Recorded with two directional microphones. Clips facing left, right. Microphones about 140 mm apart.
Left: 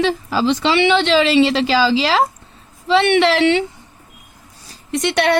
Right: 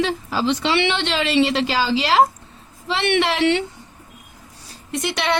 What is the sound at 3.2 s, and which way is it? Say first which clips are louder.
Speech: left 4 dB; 90° left.